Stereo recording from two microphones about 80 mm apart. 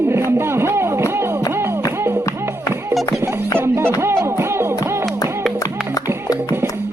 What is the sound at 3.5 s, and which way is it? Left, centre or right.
Music, right.